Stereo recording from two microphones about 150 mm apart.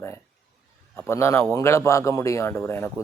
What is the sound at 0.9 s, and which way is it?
Speech, 15° left (ahead or behind).